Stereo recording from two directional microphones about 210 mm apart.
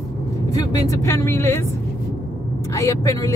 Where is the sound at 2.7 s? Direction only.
15° left (ahead or behind).